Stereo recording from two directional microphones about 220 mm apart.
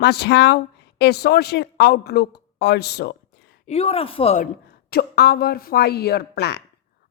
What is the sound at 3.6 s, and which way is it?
Speech, 30° left (ahead or behind).